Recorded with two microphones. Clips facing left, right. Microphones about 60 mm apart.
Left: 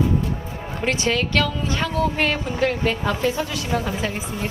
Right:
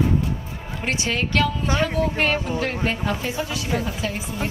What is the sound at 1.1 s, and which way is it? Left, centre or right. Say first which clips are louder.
Speech: right 2 dB; right.